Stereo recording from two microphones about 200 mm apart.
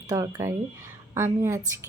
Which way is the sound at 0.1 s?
15° right (ahead or behind).